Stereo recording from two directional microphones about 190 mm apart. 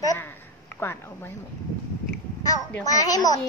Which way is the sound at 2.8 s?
20° left (ahead or behind).